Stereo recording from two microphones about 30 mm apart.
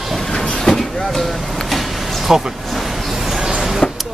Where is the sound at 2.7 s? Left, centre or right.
Centre.